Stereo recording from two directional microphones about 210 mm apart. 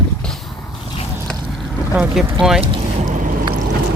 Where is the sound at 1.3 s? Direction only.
Centre (ahead or behind).